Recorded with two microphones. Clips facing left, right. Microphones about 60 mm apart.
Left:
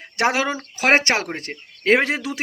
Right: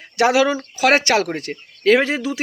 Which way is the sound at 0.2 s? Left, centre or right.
Left.